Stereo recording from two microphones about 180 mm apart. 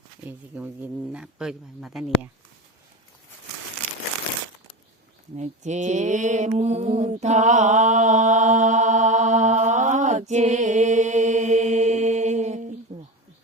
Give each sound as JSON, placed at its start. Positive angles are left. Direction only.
{"t": 0.3, "sound": "speech", "side_deg": -10}
{"t": 5.4, "sound": "mantra", "side_deg": -40}